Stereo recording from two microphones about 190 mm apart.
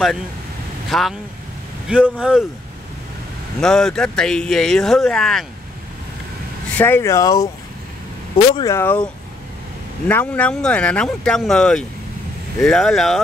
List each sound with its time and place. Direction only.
0.8 s speech: centre (ahead or behind)
3.6 s speech: 5° left (ahead or behind)
6.8 s speech: 15° left (ahead or behind)
8.5 s speech: 15° left (ahead or behind)